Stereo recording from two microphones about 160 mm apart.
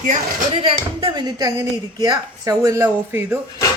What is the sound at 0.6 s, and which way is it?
Speech, 35° right (ahead or behind).